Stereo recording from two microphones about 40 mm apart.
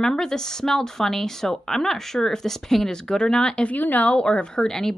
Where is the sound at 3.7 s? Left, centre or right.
Left.